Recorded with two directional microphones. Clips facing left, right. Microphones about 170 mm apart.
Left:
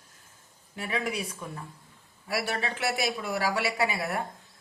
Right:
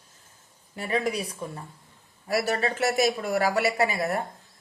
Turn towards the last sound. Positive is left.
turn(degrees=-40)  # may be behind; listen again after turning